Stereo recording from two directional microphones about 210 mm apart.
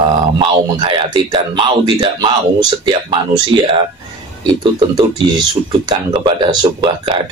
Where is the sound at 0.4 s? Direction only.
25° right (ahead or behind).